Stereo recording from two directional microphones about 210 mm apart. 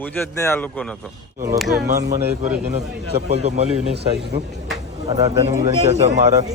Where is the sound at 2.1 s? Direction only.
45° right (ahead or behind).